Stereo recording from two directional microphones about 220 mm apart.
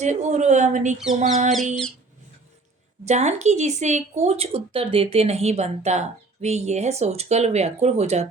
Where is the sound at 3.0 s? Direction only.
30° right (ahead or behind).